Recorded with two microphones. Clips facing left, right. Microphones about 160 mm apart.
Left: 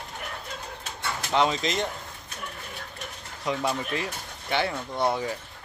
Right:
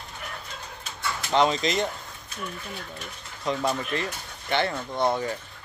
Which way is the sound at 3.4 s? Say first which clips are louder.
Right 1 dB; 5° left (ahead or behind).